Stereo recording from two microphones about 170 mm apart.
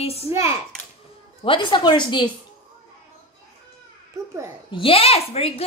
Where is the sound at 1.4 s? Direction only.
30° left (ahead or behind).